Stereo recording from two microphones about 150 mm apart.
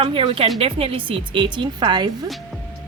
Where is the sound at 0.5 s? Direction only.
40° right (ahead or behind).